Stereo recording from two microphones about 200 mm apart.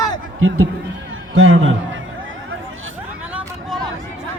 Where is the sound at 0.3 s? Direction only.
90° right.